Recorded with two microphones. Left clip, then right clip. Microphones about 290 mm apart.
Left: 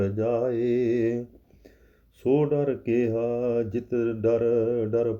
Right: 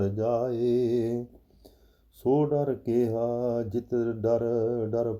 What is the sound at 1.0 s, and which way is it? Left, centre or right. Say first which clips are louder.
Mantra: left 3 dB; right.